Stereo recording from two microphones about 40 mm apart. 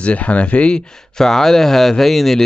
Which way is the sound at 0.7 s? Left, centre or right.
Centre.